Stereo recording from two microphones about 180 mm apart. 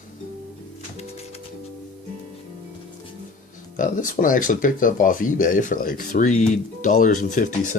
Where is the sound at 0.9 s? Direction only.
35° left (ahead or behind).